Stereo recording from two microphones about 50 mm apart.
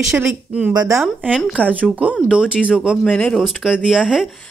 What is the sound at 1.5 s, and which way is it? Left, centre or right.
Speech, right.